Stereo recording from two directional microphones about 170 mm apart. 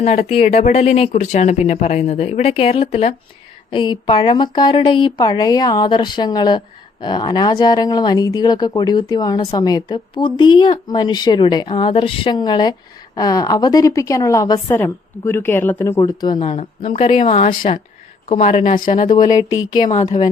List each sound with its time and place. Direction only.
0.0 s a woman's voice: 40° left (ahead or behind); by 16.0 s 10° left (ahead or behind)
16.0 s speech: 25° left (ahead or behind)
16.4 s speech: 35° left (ahead or behind)
19.0 s speech: 25° left (ahead or behind)